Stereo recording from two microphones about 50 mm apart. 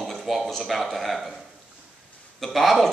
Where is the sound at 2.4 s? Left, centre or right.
Centre.